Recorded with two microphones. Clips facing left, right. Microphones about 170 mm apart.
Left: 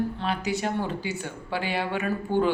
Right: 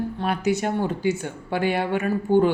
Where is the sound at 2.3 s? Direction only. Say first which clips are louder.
Right 7 dB; 15° right (ahead or behind).